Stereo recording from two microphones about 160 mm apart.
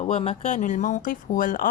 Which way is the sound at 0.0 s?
40° left (ahead or behind).